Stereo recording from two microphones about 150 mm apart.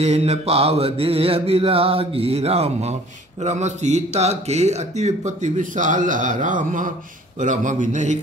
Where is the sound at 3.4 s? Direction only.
50° right (ahead or behind).